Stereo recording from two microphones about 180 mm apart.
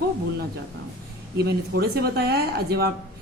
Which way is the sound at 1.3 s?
60° right (ahead or behind).